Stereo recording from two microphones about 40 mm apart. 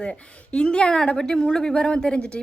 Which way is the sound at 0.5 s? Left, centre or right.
Left.